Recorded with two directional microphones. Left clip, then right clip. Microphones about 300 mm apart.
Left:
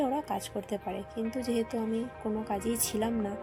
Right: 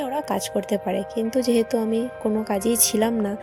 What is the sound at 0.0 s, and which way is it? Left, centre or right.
Speech, right.